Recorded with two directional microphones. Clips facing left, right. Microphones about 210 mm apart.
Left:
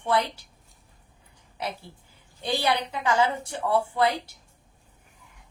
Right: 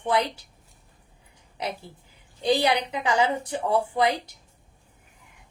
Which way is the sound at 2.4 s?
15° right (ahead or behind).